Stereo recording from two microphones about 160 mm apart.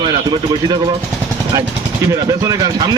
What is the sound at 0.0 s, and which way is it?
Speech, 30° right (ahead or behind).